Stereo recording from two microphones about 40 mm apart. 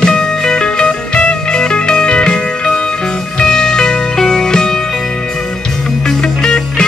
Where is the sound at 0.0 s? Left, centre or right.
Centre.